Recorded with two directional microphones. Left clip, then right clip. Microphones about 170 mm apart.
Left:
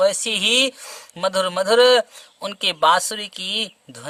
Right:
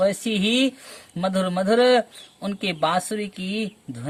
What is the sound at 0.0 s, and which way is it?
Speech, 35° left (ahead or behind).